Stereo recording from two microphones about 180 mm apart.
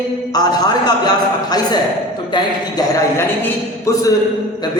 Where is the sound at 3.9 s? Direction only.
15° left (ahead or behind).